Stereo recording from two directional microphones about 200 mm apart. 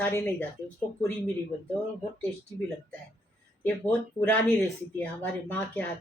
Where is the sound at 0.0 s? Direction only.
15° left (ahead or behind).